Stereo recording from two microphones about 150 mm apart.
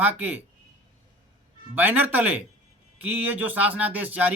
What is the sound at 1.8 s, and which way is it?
Speech, 10° right (ahead or behind).